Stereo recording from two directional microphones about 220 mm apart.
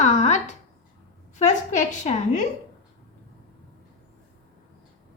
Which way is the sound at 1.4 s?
35° left (ahead or behind).